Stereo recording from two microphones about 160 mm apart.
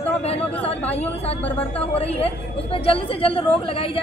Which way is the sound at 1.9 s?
40° left (ahead or behind).